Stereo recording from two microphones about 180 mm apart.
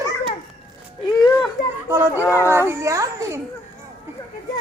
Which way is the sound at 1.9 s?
15° right (ahead or behind).